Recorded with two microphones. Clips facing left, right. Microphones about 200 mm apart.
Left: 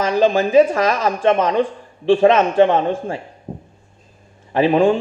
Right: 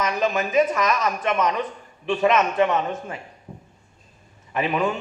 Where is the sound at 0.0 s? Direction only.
30° left (ahead or behind).